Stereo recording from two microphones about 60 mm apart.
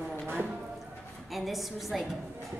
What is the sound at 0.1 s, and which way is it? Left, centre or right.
Clip-clop, right.